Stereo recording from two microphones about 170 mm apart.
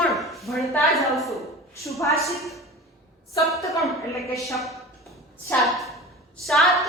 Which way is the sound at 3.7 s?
Centre (ahead or behind).